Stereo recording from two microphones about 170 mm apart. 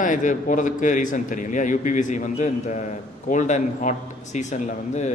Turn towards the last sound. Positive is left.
turn(degrees=45)  # may be behind; listen again after turning